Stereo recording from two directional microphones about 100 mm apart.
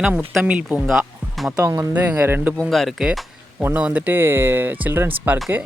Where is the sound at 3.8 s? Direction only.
15° right (ahead or behind).